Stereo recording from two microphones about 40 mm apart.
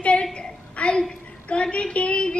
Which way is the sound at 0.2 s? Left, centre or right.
Left.